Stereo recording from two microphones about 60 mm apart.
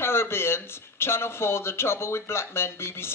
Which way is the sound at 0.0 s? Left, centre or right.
Left.